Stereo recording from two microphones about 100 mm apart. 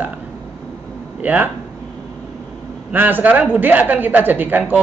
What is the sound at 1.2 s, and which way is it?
Speech, 15° right (ahead or behind).